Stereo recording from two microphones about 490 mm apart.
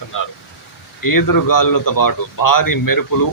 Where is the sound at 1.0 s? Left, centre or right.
Left.